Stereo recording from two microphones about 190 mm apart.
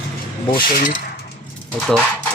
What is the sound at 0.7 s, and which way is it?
Coin, 45° left (ahead or behind).